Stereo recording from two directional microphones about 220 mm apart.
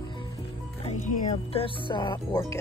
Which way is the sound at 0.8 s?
35° left (ahead or behind).